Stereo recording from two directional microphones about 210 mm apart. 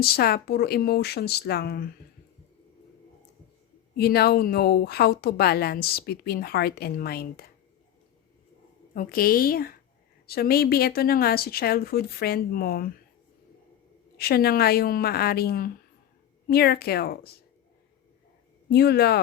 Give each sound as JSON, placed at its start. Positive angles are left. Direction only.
{"t": 0.0, "sound": "a woman's voice", "side_deg": 45}
{"t": 3.9, "sound": "a woman's voice", "side_deg": 50}
{"t": 9.0, "sound": "a woman's voice", "side_deg": 45}
{"t": 14.2, "sound": "a woman's voice", "side_deg": 50}
{"t": 18.7, "sound": "a woman's voice", "side_deg": 50}